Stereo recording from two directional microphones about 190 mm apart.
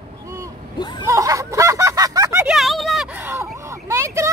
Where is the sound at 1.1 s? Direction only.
15° right (ahead or behind).